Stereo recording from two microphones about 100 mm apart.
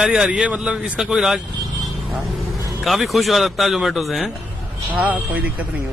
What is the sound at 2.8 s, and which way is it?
Speech, centre (ahead or behind).